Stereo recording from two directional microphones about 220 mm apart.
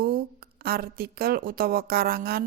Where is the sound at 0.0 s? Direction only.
45° right (ahead or behind).